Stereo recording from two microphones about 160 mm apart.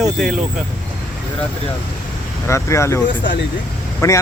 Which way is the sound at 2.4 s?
15° left (ahead or behind).